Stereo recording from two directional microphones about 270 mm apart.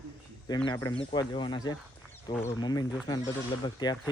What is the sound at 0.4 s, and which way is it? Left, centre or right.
Speech, centre.